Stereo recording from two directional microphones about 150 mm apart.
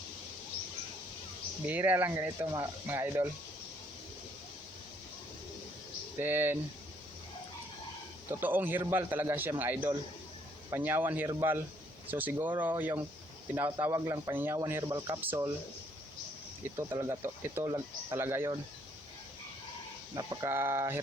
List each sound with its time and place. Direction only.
1.6 s speech: 10° right (ahead or behind)
6.1 s speech: 15° right (ahead or behind)
8.3 s speech: 15° right (ahead or behind)
16.7 s speech: 20° right (ahead or behind)
20.1 s speech: 25° right (ahead or behind)